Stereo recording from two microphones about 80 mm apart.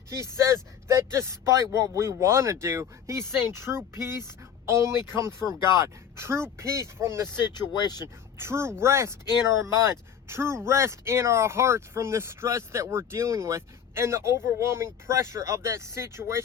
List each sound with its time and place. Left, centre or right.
0.1 s speech: right
7.5 s speech: left
8.0 s speech: right